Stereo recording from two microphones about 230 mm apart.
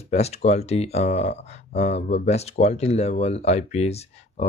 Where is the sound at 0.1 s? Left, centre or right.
Left.